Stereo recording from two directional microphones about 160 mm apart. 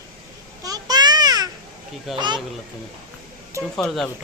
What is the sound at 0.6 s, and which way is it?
Babbling, 25° right (ahead or behind).